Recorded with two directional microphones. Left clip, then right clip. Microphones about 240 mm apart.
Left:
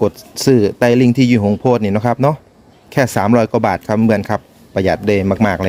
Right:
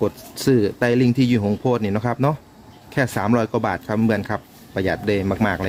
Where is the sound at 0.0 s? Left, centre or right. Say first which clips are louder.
Left 6 dB; left.